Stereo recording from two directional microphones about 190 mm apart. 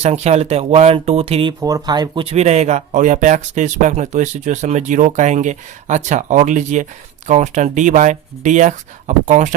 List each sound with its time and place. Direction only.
0.0 s speech: 35° right (ahead or behind)